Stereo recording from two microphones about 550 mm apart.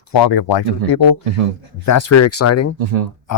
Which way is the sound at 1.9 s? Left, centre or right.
Left.